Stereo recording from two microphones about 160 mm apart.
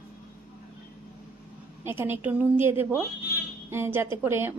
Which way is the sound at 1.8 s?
15° right (ahead or behind).